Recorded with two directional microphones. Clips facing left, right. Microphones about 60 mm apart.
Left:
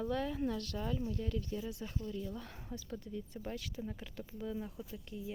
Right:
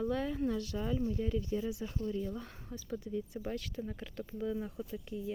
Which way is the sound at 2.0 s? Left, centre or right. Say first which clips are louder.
Right 6 dB; right.